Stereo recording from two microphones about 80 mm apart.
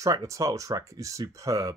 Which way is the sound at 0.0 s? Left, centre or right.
Right.